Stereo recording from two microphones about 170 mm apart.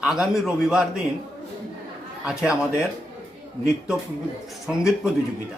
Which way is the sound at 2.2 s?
5° right (ahead or behind).